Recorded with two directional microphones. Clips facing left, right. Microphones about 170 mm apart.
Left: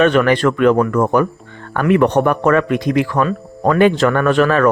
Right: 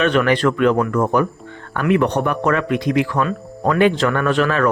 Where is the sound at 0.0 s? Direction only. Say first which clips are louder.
Left 3 dB; 50° left (ahead or behind).